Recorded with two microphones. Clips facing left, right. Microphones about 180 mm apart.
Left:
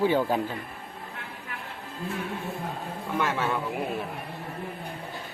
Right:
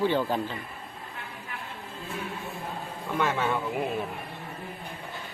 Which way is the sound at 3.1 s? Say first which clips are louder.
Right 1 dB; 5° left (ahead or behind).